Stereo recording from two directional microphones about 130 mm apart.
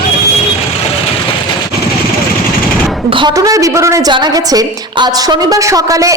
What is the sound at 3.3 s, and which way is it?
A woman's voice, 25° right (ahead or behind).